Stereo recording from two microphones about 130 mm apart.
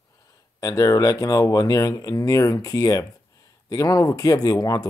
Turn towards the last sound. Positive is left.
turn(degrees=30)  # may be behind; listen again after turning